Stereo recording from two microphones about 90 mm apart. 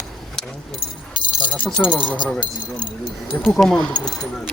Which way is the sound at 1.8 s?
10° left (ahead or behind).